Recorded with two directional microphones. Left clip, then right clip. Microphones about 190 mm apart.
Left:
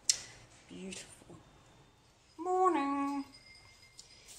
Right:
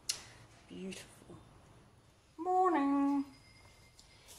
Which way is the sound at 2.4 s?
Centre (ahead or behind).